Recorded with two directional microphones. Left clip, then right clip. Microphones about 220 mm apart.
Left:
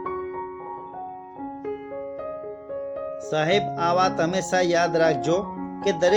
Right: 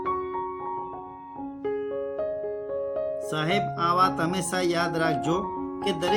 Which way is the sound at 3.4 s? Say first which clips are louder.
Left 5 dB; 15° left (ahead or behind).